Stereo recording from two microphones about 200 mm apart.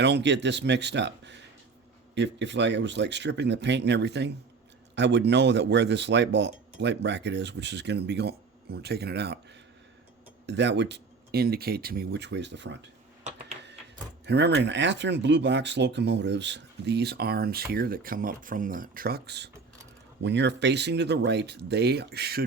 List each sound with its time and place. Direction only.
0.0 s speech: 60° right (ahead or behind)
10.4 s speech: 60° right (ahead or behind)
14.3 s speech: 60° right (ahead or behind)